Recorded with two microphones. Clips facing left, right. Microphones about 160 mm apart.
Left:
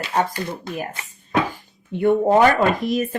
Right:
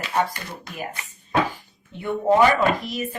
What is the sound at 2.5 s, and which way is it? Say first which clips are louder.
Speech: left 3 dB; 55° left (ahead or behind).